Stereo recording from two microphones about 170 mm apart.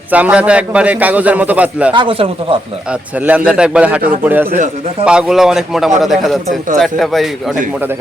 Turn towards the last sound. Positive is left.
turn(degrees=-10)  # may be behind; listen again after turning